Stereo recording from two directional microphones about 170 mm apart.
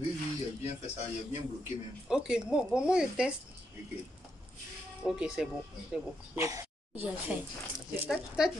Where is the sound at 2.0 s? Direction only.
5° right (ahead or behind).